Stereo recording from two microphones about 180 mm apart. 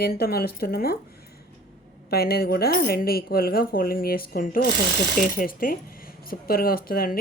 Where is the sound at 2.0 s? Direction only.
60° left (ahead or behind).